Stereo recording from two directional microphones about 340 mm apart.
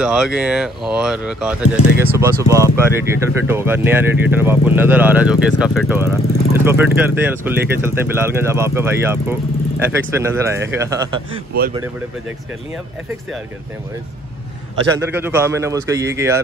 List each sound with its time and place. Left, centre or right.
0.0 s speech: centre
11.5 s speech: right
15.0 s speech: centre